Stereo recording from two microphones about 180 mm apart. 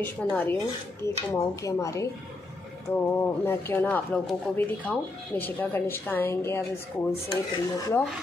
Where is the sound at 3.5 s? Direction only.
10° left (ahead or behind).